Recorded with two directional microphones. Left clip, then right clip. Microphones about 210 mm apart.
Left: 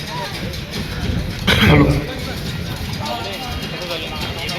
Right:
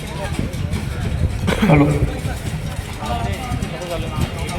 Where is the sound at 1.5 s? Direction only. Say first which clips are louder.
Left 4 dB; 5° right (ahead or behind).